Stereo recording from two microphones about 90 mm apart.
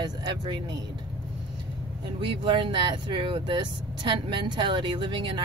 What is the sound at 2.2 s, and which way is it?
Speech, 75° right (ahead or behind).